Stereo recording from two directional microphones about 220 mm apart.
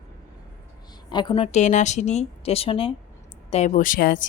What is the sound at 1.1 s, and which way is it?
A woman's voice, 20° left (ahead or behind).